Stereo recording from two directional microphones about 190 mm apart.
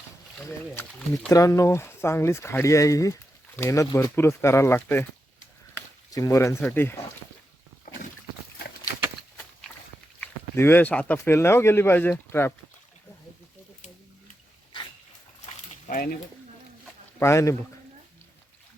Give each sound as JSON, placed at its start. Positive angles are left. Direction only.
{"t": 0.9, "sound": "speech", "side_deg": 0}
{"t": 1.3, "sound": "speech", "side_deg": 15}
{"t": 5.7, "sound": "a sound", "side_deg": 20}
{"t": 6.7, "sound": "speech", "side_deg": 10}
{"t": 10.2, "sound": "speech", "side_deg": 10}
{"t": 15.4, "sound": "a sound", "side_deg": 50}
{"t": 17.2, "sound": "speech", "side_deg": 15}